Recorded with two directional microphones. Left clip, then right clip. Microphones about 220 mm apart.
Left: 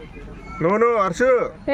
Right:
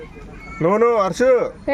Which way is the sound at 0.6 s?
30° right (ahead or behind).